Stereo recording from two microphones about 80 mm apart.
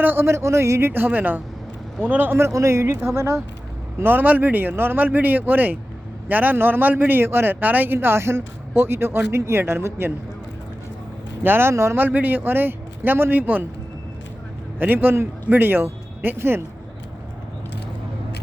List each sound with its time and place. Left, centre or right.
0.0 s speech: right
7.9 s speech: right
11.4 s speech: right
14.8 s speech: right